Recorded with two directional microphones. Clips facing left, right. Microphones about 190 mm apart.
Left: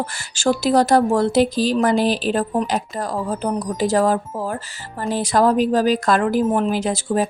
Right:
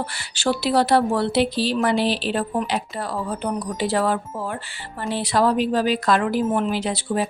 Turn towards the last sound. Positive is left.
turn(degrees=45)  # may be behind; listen again after turning